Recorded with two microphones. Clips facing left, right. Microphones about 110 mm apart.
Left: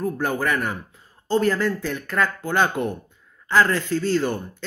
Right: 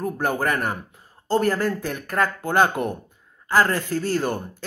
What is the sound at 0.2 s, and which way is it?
Speech, 45° right (ahead or behind).